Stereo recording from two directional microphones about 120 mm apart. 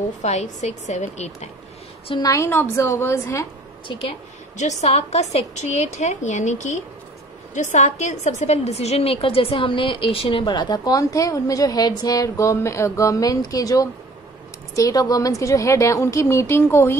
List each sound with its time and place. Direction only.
0.2 s a woman's voice: 70° left (ahead or behind)
2.2 s a woman's voice: 25° left (ahead or behind)
3.8 s a woman's voice: 45° left (ahead or behind)
4.6 s a woman's voice: 75° left (ahead or behind); by 17.0 s 20° left (ahead or behind)